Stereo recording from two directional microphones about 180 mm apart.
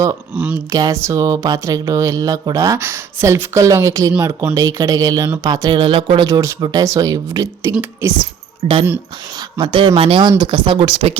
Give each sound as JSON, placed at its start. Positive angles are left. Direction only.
{"t": 0.3, "sound": "speech", "side_deg": -5}
{"t": 0.7, "sound": "speech", "side_deg": -20}
{"t": 8.6, "sound": "speech", "side_deg": -30}